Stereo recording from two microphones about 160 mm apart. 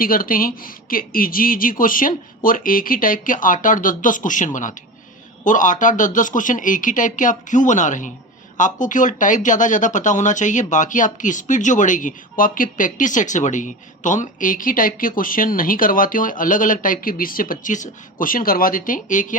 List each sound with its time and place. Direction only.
0.0 s speech: 60° left (ahead or behind)